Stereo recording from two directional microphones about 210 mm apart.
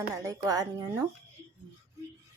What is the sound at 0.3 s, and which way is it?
Speech, 15° right (ahead or behind).